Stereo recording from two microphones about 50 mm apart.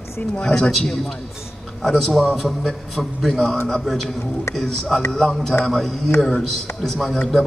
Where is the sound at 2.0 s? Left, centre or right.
Centre.